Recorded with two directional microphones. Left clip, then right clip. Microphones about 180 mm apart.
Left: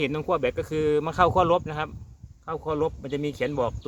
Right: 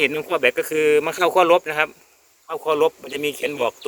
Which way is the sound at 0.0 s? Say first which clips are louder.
Right 6 dB; 5° right (ahead or behind).